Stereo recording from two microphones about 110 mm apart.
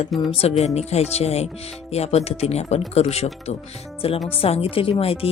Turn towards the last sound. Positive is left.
turn(degrees=60)  # may be behind; listen again after turning